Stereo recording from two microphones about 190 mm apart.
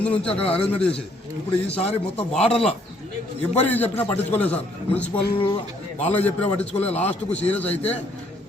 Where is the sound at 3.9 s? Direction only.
10° left (ahead or behind).